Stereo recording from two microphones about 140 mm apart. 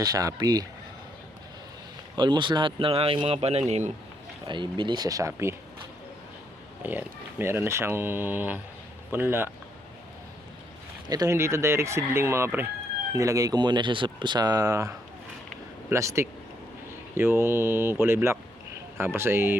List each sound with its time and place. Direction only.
0.0 s speech: 25° right (ahead or behind)
2.1 s speech: 35° right (ahead or behind); by 3.9 s 55° right (ahead or behind)
4.4 s speech: 35° right (ahead or behind)
6.8 s speech: 15° right (ahead or behind)
11.1 s speech: 25° right (ahead or behind)